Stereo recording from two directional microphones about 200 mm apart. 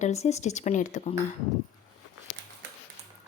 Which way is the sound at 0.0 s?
35° left (ahead or behind).